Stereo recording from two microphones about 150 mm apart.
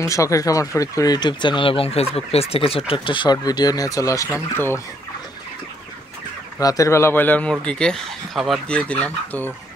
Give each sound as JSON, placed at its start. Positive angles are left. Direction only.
{"t": 0.0, "sound": "speech", "side_deg": 20}
{"t": 6.6, "sound": "speech", "side_deg": 20}